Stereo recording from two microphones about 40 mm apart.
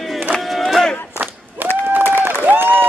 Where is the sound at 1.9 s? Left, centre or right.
Right.